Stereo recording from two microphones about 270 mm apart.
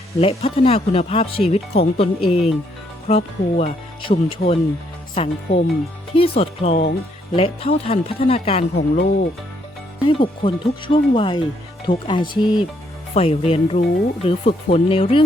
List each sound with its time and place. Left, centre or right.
0.2 s speech: left
8.7 s speech: left
10.1 s speech: centre